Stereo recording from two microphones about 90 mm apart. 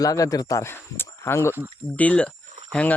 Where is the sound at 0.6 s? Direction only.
30° left (ahead or behind).